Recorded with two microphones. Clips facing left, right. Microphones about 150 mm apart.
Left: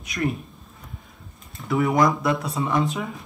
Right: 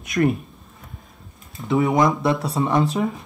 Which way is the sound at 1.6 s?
20° right (ahead or behind).